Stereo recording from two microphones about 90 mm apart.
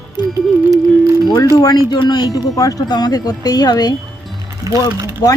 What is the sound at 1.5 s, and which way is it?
Speech, 45° left (ahead or behind).